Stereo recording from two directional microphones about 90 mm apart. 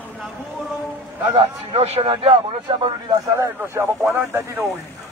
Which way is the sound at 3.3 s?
35° right (ahead or behind).